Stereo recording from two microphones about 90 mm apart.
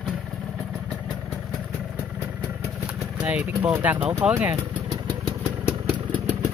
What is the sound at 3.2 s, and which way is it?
Speech, 15° right (ahead or behind).